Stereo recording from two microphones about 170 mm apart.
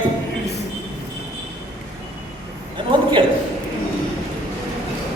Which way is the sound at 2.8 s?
30° right (ahead or behind).